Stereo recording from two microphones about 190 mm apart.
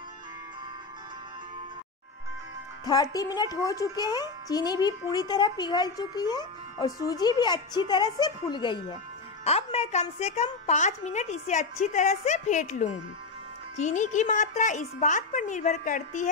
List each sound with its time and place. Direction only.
2.8 s a child's voice: 20° left (ahead or behind); by 16.3 s 40° left (ahead or behind)